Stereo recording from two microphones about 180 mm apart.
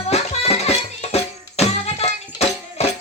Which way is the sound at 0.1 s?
35° left (ahead or behind).